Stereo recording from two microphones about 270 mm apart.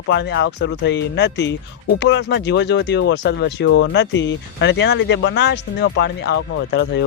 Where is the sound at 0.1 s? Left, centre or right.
Left.